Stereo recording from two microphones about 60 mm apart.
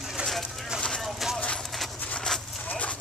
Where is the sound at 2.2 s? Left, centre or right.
Centre.